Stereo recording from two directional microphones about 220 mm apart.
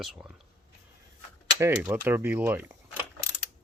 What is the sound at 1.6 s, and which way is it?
Speech, 10° right (ahead or behind).